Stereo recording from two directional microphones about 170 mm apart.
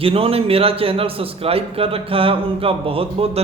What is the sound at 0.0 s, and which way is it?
A man's voice, 35° right (ahead or behind).